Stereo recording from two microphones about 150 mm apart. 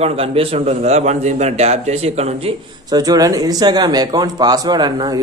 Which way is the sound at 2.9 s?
25° right (ahead or behind).